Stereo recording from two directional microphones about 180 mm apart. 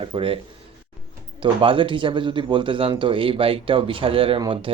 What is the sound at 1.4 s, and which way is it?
Speech, 30° right (ahead or behind).